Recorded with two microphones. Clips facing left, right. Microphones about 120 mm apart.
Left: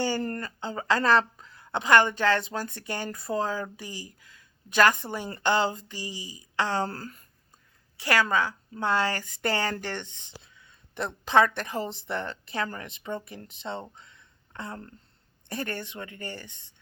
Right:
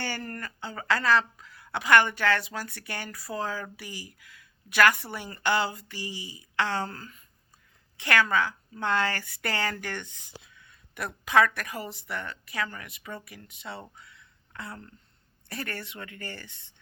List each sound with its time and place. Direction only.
0.2 s speech: 30° left (ahead or behind)
1.0 s a woman's voice: 30° left (ahead or behind)
6.1 s a woman's voice: 15° right (ahead or behind)
6.6 s speech: 15° left (ahead or behind)
6.8 s speech: 35° left (ahead or behind)
8.2 s speech: 15° left (ahead or behind)
13.9 s a sound: 25° left (ahead or behind)
15.4 s speech: 20° left (ahead or behind)